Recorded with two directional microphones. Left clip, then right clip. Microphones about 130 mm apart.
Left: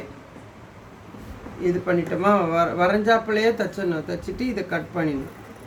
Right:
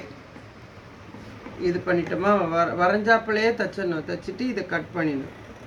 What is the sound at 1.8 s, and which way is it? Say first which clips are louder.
Speech: left 1 dB; 30° left (ahead or behind).